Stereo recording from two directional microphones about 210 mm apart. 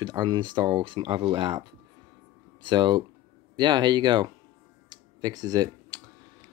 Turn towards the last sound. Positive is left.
turn(degrees=-15)  # may be behind; listen again after turning